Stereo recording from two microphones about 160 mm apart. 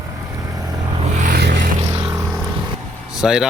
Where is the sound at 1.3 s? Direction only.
90° right.